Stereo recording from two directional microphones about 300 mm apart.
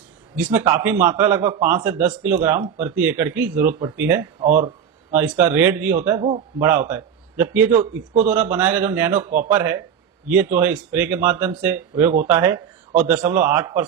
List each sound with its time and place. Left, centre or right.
0.3 s speech: centre
4.4 s speech: right
5.1 s speech: centre
6.1 s speech: right
6.6 s a man's voice: centre